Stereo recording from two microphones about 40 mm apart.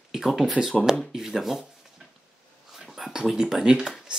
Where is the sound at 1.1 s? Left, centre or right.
Centre.